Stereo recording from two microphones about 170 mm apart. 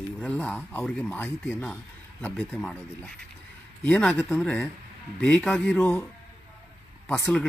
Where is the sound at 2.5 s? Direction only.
5° left (ahead or behind).